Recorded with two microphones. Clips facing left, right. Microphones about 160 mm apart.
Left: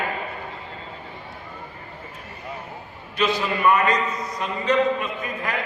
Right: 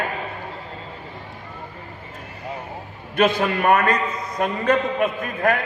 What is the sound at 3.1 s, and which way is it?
A man's voice, 55° right (ahead or behind).